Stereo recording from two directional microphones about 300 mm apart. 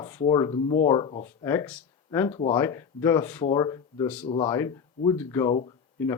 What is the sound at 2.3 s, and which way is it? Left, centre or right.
Speech, centre.